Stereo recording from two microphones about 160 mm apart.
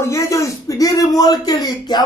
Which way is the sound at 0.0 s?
20° left (ahead or behind).